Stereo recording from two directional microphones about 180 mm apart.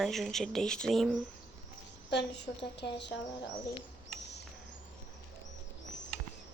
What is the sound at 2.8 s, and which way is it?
Speech, 75° left (ahead or behind).